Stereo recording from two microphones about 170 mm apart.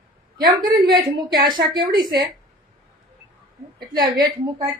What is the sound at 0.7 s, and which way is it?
A woman's voice, 25° right (ahead or behind).